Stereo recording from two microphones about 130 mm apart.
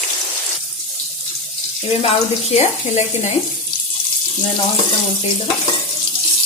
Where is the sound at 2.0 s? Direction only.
55° left (ahead or behind).